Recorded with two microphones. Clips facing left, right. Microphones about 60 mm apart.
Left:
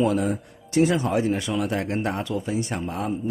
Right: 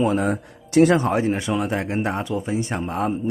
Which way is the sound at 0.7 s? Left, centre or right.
Right.